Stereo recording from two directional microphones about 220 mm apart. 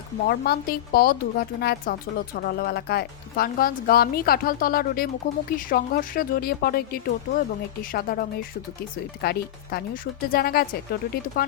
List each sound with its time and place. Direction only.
0.3 s a woman's voice: 45° left (ahead or behind)